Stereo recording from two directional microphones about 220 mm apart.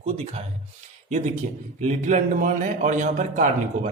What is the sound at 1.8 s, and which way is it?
A man's voice, 35° right (ahead or behind).